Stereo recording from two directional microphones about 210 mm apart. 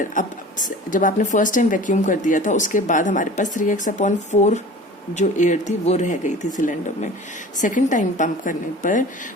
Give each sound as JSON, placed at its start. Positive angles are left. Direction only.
{"t": 0.0, "sound": "speech", "side_deg": 40}